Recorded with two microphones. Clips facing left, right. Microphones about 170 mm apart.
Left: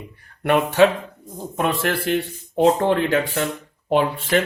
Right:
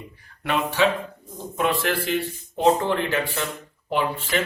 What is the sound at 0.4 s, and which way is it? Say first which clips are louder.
A man's voice: left 6 dB; 55° left (ahead or behind).